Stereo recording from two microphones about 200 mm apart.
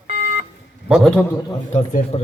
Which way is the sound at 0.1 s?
40° right (ahead or behind).